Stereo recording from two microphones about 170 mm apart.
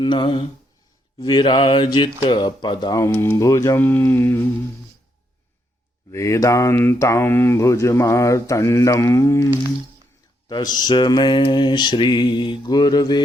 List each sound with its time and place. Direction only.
0.0 s speech: 25° left (ahead or behind)
6.1 s speech: 15° left (ahead or behind)